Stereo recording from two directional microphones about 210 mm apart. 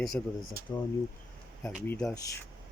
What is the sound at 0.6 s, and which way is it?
Speech, 45° right (ahead or behind).